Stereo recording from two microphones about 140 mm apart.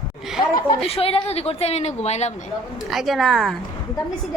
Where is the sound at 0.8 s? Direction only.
45° left (ahead or behind).